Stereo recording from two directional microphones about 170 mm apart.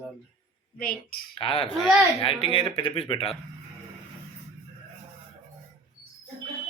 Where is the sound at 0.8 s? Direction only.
60° left (ahead or behind).